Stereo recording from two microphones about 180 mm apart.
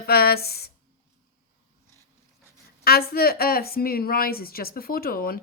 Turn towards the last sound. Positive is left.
turn(degrees=55)  # may be behind; listen again after turning